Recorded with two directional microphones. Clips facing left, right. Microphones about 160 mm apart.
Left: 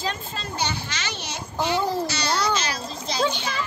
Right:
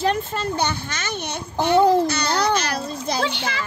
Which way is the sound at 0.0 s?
60° right (ahead or behind).